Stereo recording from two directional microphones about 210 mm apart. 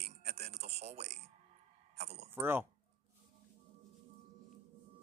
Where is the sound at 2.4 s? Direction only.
10° right (ahead or behind).